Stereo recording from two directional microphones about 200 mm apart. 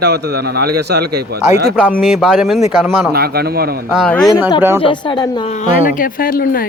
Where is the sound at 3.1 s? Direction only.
50° right (ahead or behind).